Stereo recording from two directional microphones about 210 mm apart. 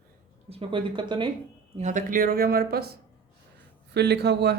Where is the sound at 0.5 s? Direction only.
25° right (ahead or behind).